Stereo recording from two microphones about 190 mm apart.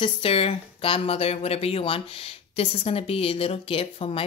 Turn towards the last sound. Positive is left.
turn(degrees=30)  # may be behind; listen again after turning